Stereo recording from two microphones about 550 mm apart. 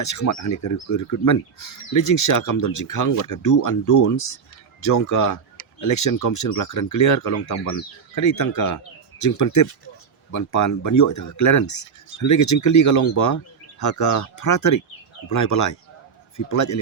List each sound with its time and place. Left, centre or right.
0.0 s speech: left